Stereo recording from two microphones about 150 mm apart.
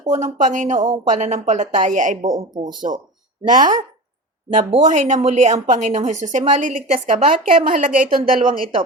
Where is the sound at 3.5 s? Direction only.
60° right (ahead or behind).